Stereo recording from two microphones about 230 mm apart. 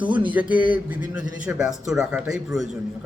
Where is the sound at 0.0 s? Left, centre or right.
Centre.